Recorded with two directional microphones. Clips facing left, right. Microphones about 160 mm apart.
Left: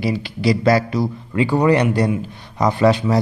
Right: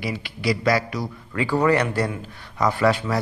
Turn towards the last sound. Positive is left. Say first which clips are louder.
# left 5 dB
turn(degrees=20)  # may be behind; listen again after turning